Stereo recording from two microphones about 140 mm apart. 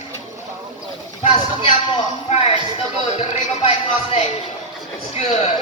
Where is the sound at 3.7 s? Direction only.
45° left (ahead or behind).